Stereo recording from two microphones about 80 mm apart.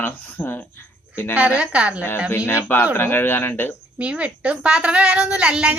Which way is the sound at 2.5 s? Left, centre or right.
Left.